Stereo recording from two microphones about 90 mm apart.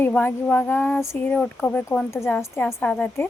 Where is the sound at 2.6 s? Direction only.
10° left (ahead or behind).